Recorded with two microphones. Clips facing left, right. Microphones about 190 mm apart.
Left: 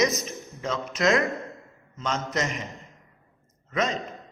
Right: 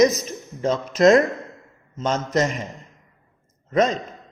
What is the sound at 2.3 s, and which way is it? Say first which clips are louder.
Speech: right 10 dB; 45° right (ahead or behind).